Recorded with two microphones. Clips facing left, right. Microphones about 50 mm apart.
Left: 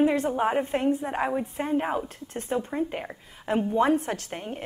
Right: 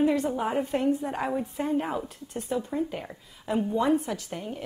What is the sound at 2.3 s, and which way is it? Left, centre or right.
A woman's voice, left.